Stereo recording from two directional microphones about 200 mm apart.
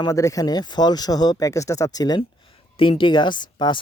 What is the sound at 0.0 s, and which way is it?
Speech, 15° left (ahead or behind).